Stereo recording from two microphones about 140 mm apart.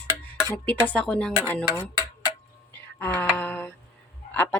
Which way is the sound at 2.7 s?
15° left (ahead or behind).